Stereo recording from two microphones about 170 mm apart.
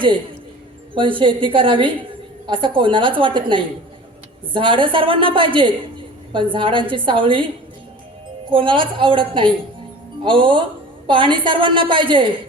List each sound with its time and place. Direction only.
0.9 s a woman's voice: 30° right (ahead or behind)
8.4 s a woman's voice: 30° right (ahead or behind)